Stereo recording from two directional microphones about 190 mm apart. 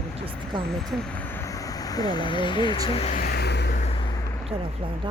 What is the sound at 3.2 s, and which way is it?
Vehicle, 55° left (ahead or behind).